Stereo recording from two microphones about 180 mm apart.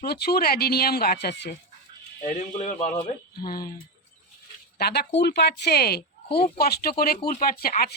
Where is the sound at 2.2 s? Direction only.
40° left (ahead or behind).